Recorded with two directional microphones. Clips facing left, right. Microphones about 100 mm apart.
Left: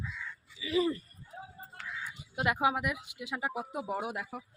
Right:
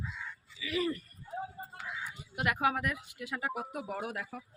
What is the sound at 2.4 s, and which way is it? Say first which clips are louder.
Speech: left 1 dB; 20° left (ahead or behind).